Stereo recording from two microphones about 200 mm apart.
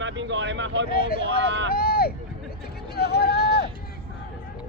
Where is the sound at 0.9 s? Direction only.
50° left (ahead or behind).